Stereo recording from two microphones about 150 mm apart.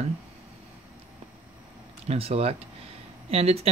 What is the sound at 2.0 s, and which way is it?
Speech, 40° right (ahead or behind).